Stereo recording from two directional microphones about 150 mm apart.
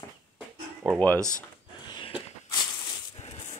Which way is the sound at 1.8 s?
30° left (ahead or behind).